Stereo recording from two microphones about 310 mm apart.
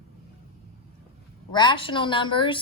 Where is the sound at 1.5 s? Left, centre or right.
Centre.